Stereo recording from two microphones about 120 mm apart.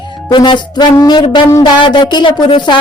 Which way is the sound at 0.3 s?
40° left (ahead or behind).